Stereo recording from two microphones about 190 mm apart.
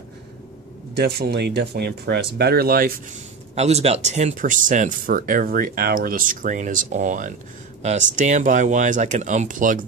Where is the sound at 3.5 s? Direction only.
35° right (ahead or behind).